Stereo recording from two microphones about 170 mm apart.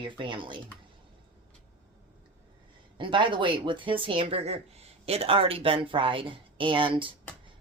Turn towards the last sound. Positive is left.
turn(degrees=-30)  # may be behind; listen again after turning